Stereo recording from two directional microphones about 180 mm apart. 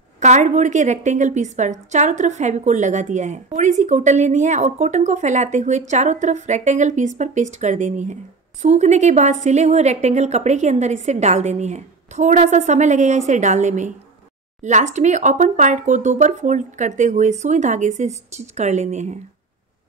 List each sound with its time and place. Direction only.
0.2 s a woman's voice: 40° right (ahead or behind)